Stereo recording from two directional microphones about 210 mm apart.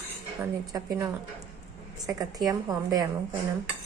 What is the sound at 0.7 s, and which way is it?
A woman's voice, 15° right (ahead or behind).